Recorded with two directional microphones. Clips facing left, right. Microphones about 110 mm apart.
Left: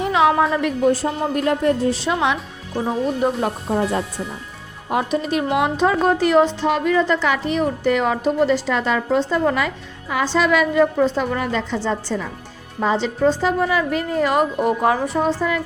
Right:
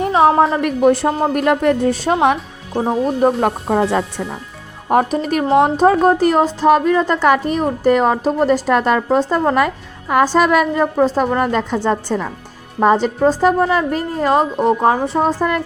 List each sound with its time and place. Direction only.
0.0 s a woman's voice: 35° right (ahead or behind)
0.6 s a woman's voice: 60° right (ahead or behind)
1.9 s a woman's voice: 45° right (ahead or behind)
2.7 s speech: 25° right (ahead or behind)
3.2 s a woman's voice: 45° right (ahead or behind)
3.7 s speech: 80° right
4.9 s a woman's voice: 45° right (ahead or behind); by 14.9 s 30° right (ahead or behind)
15.2 s a woman's voice: 45° right (ahead or behind)